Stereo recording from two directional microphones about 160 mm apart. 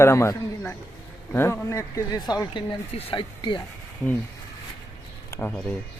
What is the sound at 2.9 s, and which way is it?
Speech, 35° left (ahead or behind).